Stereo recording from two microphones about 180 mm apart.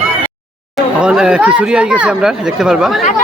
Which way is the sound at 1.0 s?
5° right (ahead or behind).